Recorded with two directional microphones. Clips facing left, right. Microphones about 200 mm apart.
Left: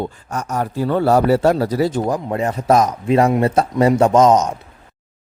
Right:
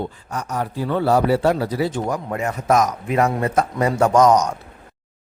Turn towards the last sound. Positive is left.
turn(degrees=25)  # may be behind; listen again after turning